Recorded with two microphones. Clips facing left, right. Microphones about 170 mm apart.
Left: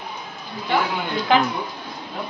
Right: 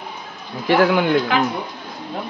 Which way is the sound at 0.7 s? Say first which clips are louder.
Right 7 dB; 90° right.